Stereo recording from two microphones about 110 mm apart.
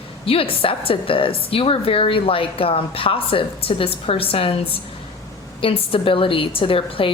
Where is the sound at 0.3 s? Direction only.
55° left (ahead or behind).